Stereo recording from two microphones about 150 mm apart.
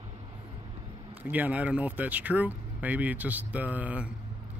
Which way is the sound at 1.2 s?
10° right (ahead or behind).